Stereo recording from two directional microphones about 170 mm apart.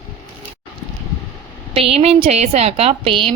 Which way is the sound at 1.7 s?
35° right (ahead or behind).